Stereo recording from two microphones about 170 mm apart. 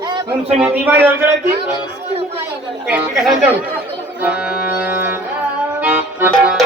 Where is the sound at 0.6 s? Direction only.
10° right (ahead or behind).